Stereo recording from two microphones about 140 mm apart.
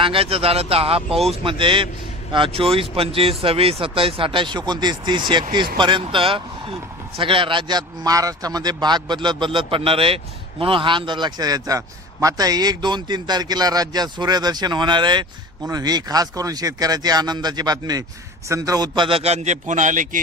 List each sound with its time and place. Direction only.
0.0 s a man's voice: 40° right (ahead or behind); by 20.1 s 65° right (ahead or behind)